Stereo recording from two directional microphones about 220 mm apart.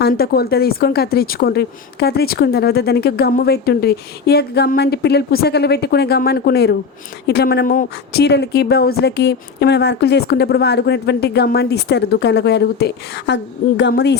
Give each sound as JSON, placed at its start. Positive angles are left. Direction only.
{"t": 0.0, "sound": "speech", "side_deg": 45}